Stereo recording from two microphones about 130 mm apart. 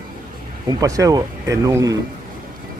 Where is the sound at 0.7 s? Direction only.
25° right (ahead or behind).